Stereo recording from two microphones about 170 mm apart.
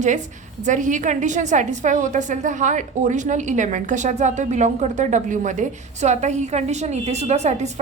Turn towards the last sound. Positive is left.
turn(degrees=-40)  # may be behind; listen again after turning